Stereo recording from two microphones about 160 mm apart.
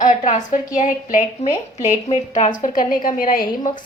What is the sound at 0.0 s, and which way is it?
A woman's voice, 50° left (ahead or behind).